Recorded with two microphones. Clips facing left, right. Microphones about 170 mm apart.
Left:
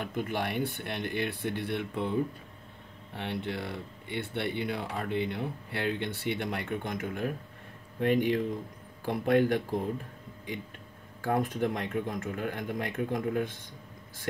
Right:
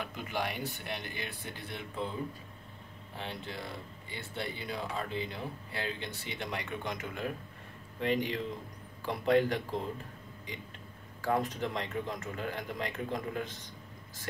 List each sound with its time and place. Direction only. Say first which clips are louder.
0.0 s speech: left 4 dB; 55° left (ahead or behind)
3.2 s speech: left 6 dB; 65° left (ahead or behind)
11.1 s speech: left 3 dB; 55° left (ahead or behind)